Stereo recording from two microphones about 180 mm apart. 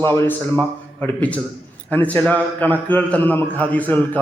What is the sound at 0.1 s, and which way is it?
A man's voice, 10° left (ahead or behind).